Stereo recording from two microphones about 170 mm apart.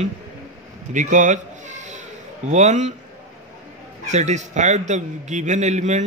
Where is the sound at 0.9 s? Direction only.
45° right (ahead or behind).